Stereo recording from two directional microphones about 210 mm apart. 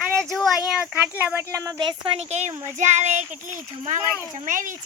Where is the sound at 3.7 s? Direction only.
30° right (ahead or behind).